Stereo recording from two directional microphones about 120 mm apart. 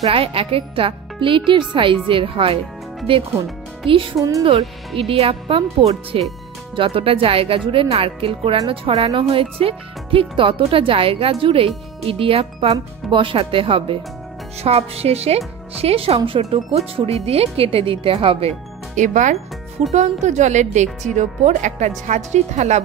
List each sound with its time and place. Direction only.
0.0 s speech: 50° right (ahead or behind)
3.8 s speech: 45° right (ahead or behind)
14.6 s speech: 60° right (ahead or behind)
18.9 s speech: 90° right
19.9 s speech: 70° right (ahead or behind)